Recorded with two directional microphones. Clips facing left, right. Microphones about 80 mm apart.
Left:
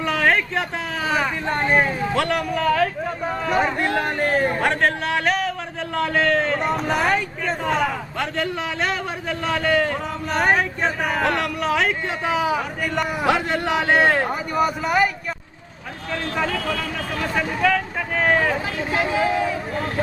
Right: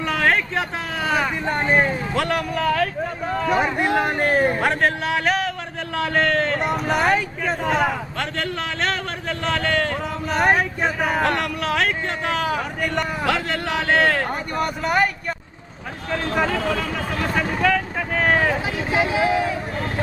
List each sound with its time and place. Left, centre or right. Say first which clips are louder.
0.0 s a sound: left 1 dB; centre
1.0 s speech: right 1 dB; centre
3.5 s speech: right 1 dB; centre
4.5 s speech: even; centre
13.2 s a man's voice: left 2 dB; left
14.3 s speech: left 3 dB; centre
17.3 s speech: even; centre